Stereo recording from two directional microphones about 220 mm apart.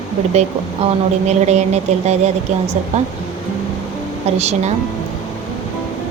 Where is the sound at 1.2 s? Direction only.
30° right (ahead or behind).